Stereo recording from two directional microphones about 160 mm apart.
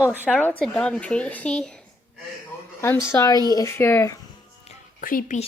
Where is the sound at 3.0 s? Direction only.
20° left (ahead or behind).